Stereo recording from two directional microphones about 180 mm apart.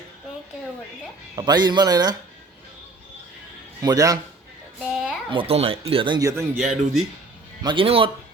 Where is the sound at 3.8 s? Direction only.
20° right (ahead or behind).